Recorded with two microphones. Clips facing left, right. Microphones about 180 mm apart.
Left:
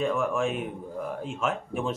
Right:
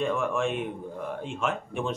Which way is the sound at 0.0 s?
Centre (ahead or behind).